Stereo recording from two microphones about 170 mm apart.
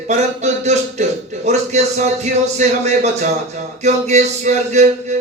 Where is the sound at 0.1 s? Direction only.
40° right (ahead or behind).